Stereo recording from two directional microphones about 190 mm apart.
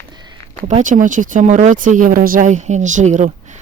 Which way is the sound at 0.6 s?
40° right (ahead or behind).